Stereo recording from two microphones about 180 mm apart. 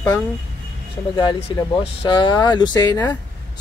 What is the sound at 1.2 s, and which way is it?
Speech, 30° left (ahead or behind).